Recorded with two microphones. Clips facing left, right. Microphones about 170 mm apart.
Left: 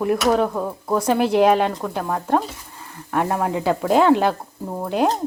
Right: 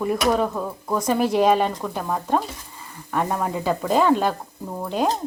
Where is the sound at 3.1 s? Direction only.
5° left (ahead or behind).